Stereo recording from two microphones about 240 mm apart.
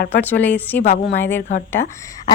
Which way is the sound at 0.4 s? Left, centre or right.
Centre.